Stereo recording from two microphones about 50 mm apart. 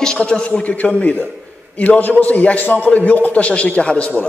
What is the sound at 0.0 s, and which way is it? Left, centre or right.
A man's voice, centre.